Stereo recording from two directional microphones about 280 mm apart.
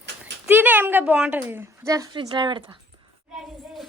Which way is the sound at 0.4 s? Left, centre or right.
Centre.